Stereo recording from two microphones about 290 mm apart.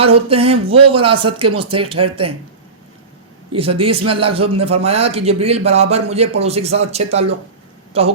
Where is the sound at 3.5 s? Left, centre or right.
Centre.